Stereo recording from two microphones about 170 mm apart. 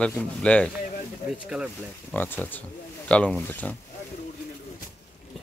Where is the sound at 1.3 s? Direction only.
5° right (ahead or behind).